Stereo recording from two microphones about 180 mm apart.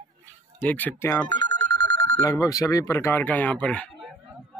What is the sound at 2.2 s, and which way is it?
Speech, 15° left (ahead or behind).